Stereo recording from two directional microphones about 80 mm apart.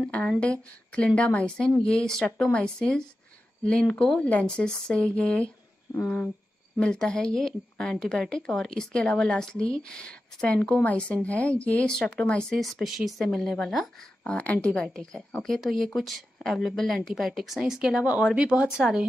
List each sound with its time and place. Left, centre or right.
0.1 s a woman's voice: centre
6.0 s cricket: left
6.8 s a woman's voice: centre